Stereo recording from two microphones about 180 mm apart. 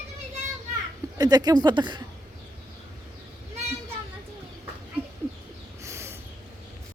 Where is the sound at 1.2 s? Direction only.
20° right (ahead or behind).